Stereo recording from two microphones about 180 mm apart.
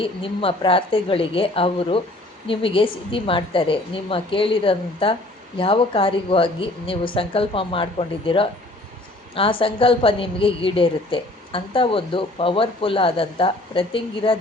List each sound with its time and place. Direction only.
0.0 s a woman's voice: 30° left (ahead or behind)